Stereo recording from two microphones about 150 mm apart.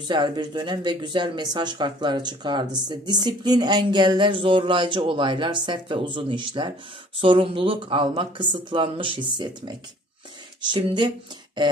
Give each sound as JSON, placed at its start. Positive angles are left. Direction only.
{"t": 0.1, "sound": "speech", "side_deg": -30}